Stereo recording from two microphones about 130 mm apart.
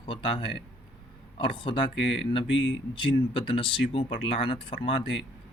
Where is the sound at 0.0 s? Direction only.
40° left (ahead or behind).